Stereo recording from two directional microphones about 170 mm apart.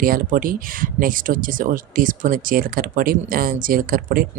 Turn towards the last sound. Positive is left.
turn(degrees=-55)  # may be behind; listen again after turning